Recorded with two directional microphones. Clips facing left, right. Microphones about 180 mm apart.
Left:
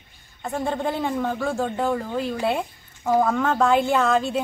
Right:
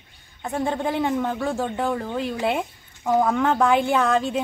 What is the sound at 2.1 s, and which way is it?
Speech, 15° right (ahead or behind).